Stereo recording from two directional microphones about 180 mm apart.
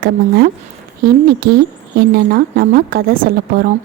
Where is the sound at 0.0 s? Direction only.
65° right (ahead or behind).